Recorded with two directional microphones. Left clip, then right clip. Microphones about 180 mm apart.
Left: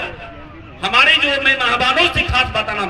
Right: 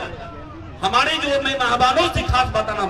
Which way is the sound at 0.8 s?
55° right (ahead or behind).